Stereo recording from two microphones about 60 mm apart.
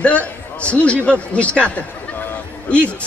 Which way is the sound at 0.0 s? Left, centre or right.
Left.